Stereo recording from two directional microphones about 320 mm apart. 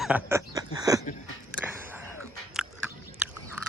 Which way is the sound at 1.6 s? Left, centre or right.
Centre.